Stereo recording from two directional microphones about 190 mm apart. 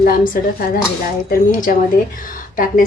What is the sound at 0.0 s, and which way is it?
A woman's voice, 50° left (ahead or behind).